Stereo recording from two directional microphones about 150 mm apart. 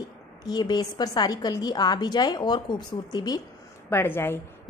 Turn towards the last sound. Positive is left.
turn(degrees=15)  # may be behind; listen again after turning